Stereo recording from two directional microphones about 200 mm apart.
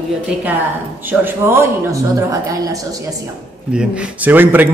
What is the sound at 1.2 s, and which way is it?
A man's voice, 10° right (ahead or behind).